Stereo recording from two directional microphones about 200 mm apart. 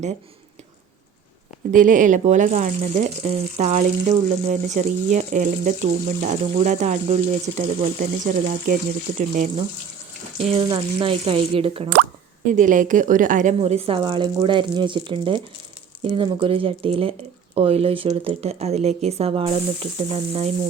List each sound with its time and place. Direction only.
1.7 s speech: 40° right (ahead or behind)
10.3 s speech: 30° right (ahead or behind)
12.5 s speech: 40° right (ahead or behind)